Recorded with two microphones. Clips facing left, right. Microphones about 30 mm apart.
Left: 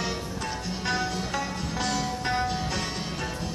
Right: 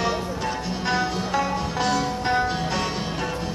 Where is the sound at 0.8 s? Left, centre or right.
Centre.